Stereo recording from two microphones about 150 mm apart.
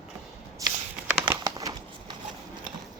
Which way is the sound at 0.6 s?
25° right (ahead or behind).